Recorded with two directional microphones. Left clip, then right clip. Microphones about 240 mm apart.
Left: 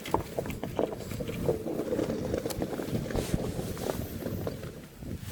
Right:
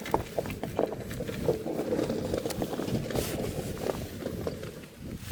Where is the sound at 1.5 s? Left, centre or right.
Right.